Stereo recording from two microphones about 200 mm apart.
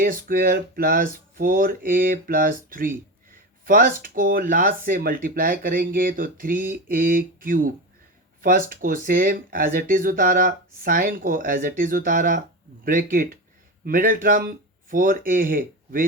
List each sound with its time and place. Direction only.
0.0 s speech: 45° right (ahead or behind)